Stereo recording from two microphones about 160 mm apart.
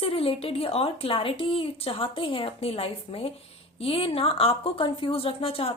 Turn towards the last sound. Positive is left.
turn(degrees=35)  # may be behind; listen again after turning